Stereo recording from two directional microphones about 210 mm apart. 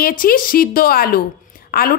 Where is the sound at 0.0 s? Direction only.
45° left (ahead or behind).